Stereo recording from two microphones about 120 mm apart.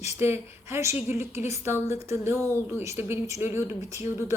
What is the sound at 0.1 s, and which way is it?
A woman's voice, 20° right (ahead or behind).